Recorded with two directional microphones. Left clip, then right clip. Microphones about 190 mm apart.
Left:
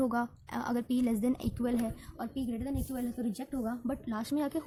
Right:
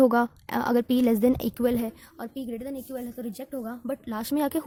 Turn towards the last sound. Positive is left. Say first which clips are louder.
# right 7 dB
turn(degrees=-55)  # may be behind; listen again after turning